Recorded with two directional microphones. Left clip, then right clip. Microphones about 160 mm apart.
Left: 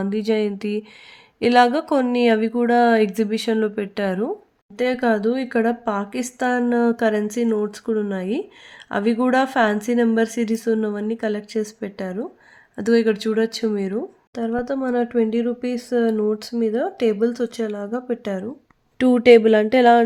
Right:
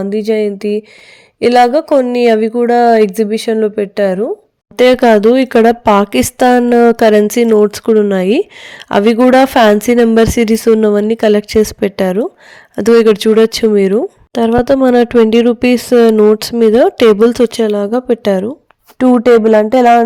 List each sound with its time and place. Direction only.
0.0 s speech: 25° right (ahead or behind)
4.8 s speech: 55° right (ahead or behind)
18.9 s speech: 20° right (ahead or behind)